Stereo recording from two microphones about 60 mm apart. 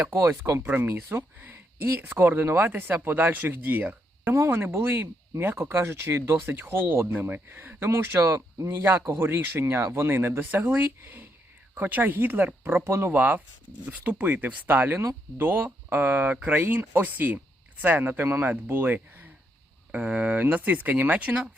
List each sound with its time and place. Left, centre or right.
0.0 s speech: right
0.6 s speech: right
4.3 s speech: right
7.1 s speech: right
19.9 s speech: right